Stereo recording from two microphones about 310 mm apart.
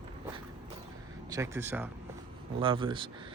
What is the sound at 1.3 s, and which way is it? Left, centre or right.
Speech, centre.